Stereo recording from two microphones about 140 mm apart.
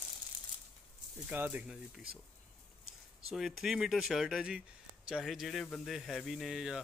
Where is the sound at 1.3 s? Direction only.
10° right (ahead or behind).